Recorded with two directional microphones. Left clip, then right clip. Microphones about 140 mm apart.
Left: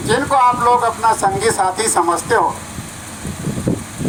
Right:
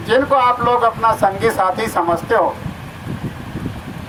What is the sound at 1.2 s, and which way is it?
Speech, 60° right (ahead or behind).